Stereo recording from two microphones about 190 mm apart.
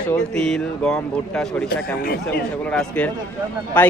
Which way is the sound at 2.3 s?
5° left (ahead or behind).